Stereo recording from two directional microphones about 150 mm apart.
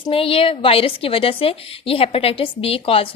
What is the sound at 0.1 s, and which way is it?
A woman's voice, 40° left (ahead or behind).